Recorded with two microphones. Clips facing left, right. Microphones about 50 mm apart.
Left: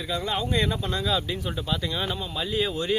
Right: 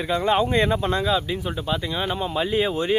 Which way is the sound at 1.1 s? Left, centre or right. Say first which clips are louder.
Right 3 dB; centre.